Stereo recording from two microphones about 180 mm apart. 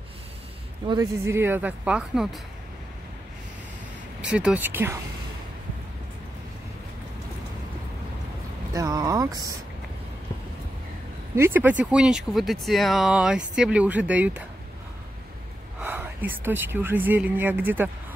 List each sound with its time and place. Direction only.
0.8 s speech: 20° right (ahead or behind)
4.2 s speech: 5° right (ahead or behind)
8.7 s speech: 20° right (ahead or behind)
11.3 s speech: 10° right (ahead or behind)
15.8 s speech: 10° right (ahead or behind)